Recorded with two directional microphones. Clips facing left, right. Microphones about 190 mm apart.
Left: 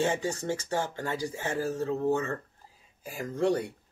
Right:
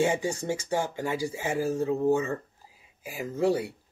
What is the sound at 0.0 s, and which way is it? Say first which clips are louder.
Speech: right 2 dB; 10° right (ahead or behind).